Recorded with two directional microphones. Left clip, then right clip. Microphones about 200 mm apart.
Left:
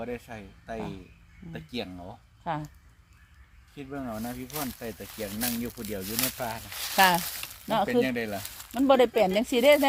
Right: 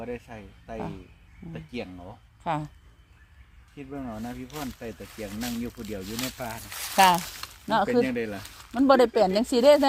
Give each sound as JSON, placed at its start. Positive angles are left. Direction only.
{"t": 0.0, "sound": "speech", "side_deg": 40}
{"t": 2.4, "sound": "speech", "side_deg": -30}
{"t": 3.8, "sound": "speech", "side_deg": 40}
{"t": 6.7, "sound": "speech", "side_deg": -15}
{"t": 8.0, "sound": "speech", "side_deg": 50}
{"t": 8.7, "sound": "speech", "side_deg": -25}